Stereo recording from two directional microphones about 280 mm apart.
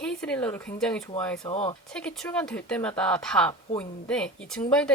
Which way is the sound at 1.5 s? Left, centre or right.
Left.